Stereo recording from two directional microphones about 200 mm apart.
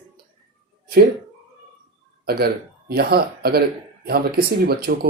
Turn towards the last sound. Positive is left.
turn(degrees=-50)  # may be behind; listen again after turning